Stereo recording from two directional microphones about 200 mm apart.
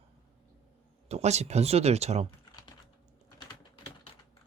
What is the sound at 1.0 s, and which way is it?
Speech, 35° right (ahead or behind).